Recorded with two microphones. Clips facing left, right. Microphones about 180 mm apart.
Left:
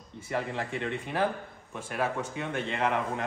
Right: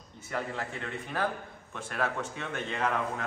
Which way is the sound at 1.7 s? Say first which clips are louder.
Left 2 dB; 15° left (ahead or behind).